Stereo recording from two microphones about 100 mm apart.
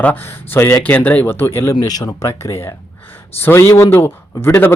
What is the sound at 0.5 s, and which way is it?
Speech, 25° left (ahead or behind).